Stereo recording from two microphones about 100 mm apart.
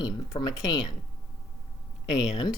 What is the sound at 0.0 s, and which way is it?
Speech, 40° left (ahead or behind).